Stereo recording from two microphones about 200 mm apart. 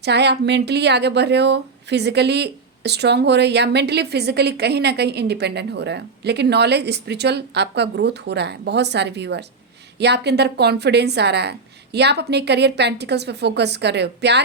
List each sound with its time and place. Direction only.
0.0 s a woman's voice: 55° right (ahead or behind)